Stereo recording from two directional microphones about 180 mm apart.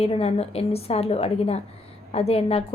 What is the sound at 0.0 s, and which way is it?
A woman's voice, 35° left (ahead or behind).